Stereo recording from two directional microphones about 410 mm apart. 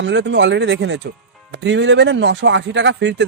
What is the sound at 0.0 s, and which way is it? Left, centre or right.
A man's voice, right.